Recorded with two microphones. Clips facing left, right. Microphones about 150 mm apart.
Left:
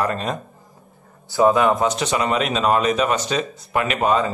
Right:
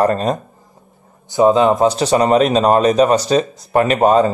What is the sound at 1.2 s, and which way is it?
Speech, 20° right (ahead or behind).